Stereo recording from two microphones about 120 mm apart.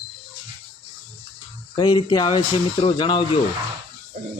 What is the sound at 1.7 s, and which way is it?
Speech, 35° left (ahead or behind).